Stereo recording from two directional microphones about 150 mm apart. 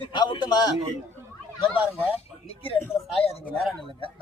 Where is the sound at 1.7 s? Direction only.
10° right (ahead or behind).